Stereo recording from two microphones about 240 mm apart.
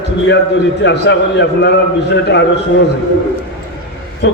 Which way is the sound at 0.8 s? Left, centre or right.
Left.